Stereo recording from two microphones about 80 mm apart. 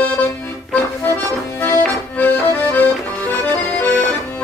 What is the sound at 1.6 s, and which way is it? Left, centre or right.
Accordion, left.